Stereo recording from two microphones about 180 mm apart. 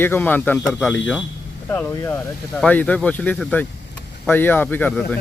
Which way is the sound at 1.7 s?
15° left (ahead or behind).